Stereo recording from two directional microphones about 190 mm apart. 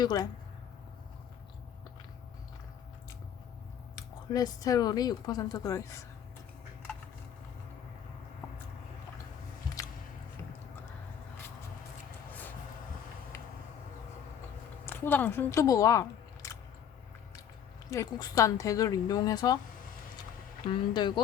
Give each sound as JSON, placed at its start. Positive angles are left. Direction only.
{"t": 0.0, "sound": "speech", "side_deg": 20}
{"t": 3.9, "sound": "speech", "side_deg": 20}
{"t": 12.3, "sound": "a sound", "side_deg": 10}
{"t": 14.8, "sound": "speech", "side_deg": 10}
{"t": 17.9, "sound": "speech", "side_deg": 20}
{"t": 20.7, "sound": "speech", "side_deg": 25}